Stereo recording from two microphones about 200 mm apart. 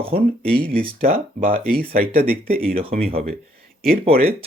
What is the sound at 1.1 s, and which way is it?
Speech, 45° right (ahead or behind).